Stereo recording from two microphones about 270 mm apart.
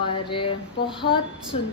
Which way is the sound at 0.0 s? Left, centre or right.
Centre.